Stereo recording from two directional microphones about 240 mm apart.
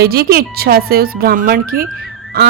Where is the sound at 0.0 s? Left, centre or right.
Right.